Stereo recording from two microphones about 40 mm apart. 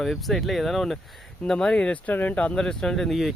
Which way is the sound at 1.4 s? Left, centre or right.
Centre.